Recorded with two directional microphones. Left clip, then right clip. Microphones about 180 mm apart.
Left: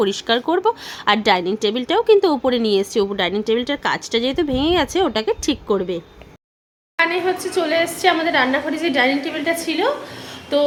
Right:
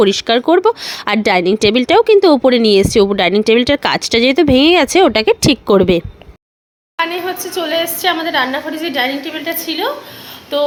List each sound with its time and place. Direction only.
0.0 s a woman's voice: 30° right (ahead or behind); by 6.0 s 45° right (ahead or behind)
6.9 s a woman's voice: centre (ahead or behind)